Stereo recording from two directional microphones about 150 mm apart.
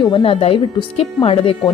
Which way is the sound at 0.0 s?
35° left (ahead or behind).